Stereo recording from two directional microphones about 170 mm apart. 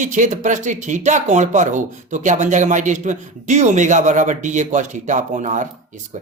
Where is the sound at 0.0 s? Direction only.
45° right (ahead or behind).